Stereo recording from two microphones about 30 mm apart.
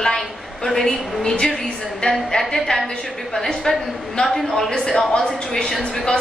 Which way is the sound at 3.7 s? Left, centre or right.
Left.